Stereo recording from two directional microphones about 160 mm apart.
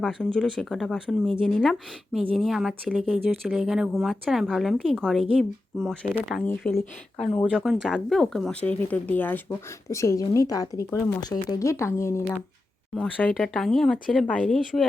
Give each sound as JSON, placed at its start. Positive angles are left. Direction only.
{"t": 0.0, "sound": "speech", "side_deg": 0}
{"t": 7.5, "sound": "speech", "side_deg": -5}